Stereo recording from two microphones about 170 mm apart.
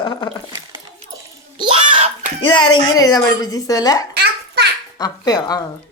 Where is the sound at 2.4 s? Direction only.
25° left (ahead or behind).